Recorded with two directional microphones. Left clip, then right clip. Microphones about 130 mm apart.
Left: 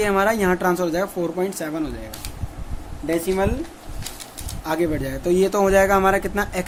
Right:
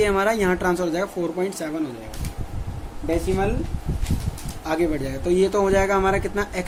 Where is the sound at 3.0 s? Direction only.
50° left (ahead or behind).